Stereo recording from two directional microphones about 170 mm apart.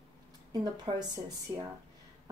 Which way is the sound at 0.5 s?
25° right (ahead or behind).